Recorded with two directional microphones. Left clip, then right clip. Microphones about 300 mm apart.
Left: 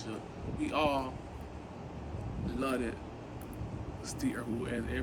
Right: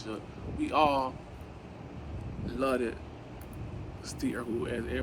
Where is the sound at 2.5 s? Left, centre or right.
Centre.